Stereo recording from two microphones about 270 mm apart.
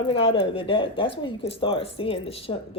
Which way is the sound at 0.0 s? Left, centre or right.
Left.